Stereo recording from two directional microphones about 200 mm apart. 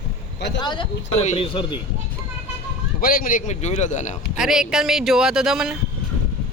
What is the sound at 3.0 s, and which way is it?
A man's voice, 45° left (ahead or behind).